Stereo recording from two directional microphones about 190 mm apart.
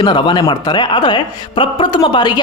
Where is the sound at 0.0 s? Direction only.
25° left (ahead or behind).